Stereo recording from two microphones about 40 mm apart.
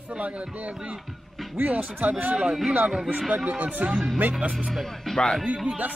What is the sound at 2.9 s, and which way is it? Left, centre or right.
Speech, centre.